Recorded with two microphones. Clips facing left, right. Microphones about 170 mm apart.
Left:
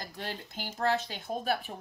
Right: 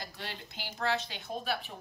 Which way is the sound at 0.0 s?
45° left (ahead or behind).